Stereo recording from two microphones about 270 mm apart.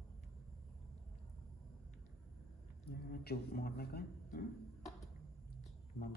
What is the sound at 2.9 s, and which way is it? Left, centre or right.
Speech, left.